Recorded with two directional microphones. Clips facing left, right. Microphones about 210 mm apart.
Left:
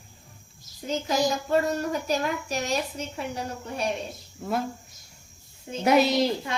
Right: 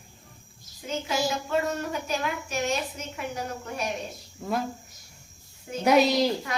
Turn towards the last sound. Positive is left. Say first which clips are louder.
# even
turn(degrees=0)  # may be behind; listen again after turning